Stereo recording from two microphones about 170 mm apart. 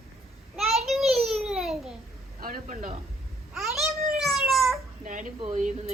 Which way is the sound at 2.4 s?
55° right (ahead or behind).